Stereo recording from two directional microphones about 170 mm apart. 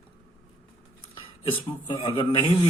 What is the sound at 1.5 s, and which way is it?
A man's voice, 30° left (ahead or behind).